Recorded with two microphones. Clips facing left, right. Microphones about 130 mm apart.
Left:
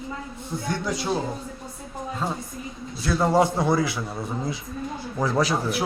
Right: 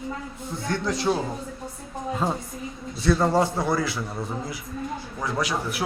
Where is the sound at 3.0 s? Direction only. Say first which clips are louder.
Even; 5° left (ahead or behind).